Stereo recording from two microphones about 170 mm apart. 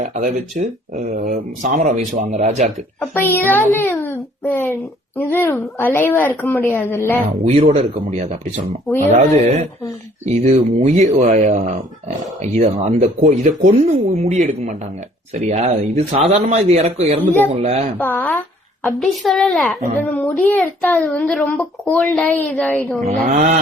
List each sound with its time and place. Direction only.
0.0 s speech: 50° right (ahead or behind)
3.0 s a child's voice: 10° left (ahead or behind)
7.4 s speech: 45° right (ahead or behind)
17.9 s a woman's voice: 10° left (ahead or behind)
18.9 s a woman's voice: centre (ahead or behind)